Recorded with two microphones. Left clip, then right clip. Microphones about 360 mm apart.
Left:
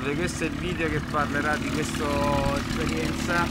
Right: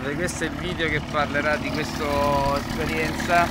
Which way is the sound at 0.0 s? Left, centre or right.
Centre.